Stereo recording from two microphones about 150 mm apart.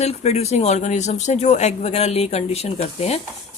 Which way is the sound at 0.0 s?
45° left (ahead or behind).